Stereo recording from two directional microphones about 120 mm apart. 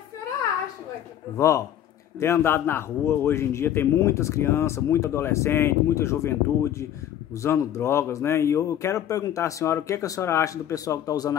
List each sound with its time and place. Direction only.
1.3 s a man's voice: 25° left (ahead or behind)